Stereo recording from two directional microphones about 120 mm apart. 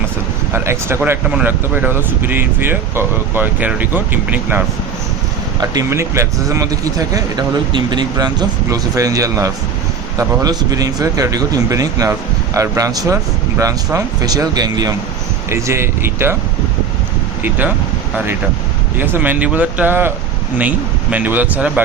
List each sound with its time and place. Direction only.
0.5 s speech: 20° right (ahead or behind)
5.9 s speech: 25° right (ahead or behind)
18.9 s speech: 15° right (ahead or behind)